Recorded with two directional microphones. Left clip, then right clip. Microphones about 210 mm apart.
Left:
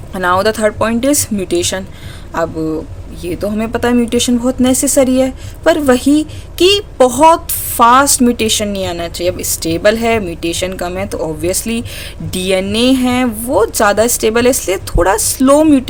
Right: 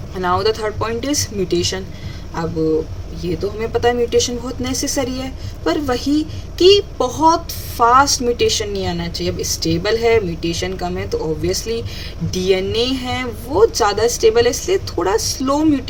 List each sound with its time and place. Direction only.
0.1 s speech: 55° left (ahead or behind)
3.2 s a woman's voice: 55° left (ahead or behind)